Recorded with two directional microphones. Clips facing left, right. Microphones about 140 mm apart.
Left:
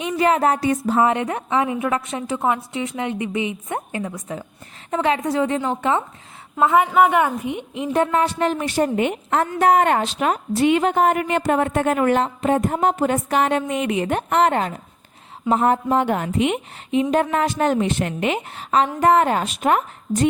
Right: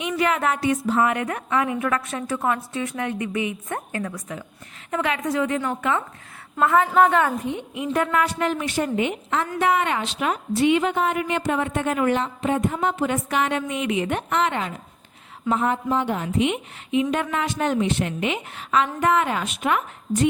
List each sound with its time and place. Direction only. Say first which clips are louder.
0.0 s a woman's voice: left 4 dB; 35° left (ahead or behind)
4.9 s a woman's voice: left 4 dB; 30° left (ahead or behind); by 16.6 s 55° left (ahead or behind)
16.9 s a woman's voice: left 4 dB; 35° left (ahead or behind)
18.5 s a woman's voice: left 3 dB; 35° left (ahead or behind)